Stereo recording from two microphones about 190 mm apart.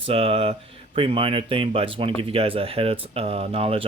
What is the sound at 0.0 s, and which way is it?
Speech, 30° right (ahead or behind).